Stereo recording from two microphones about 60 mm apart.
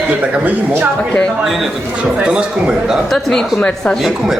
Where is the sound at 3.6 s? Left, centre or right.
Centre.